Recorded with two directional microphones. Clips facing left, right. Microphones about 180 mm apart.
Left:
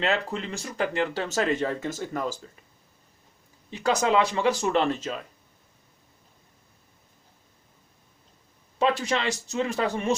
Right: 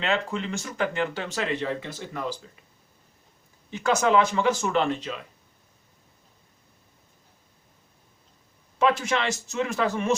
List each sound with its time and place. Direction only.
0.0 s speech: 40° left (ahead or behind)
3.8 s speech: 35° left (ahead or behind)
8.8 s speech: 35° left (ahead or behind)